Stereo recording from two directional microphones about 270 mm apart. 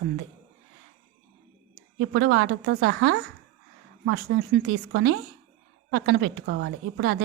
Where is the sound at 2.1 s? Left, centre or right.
Right.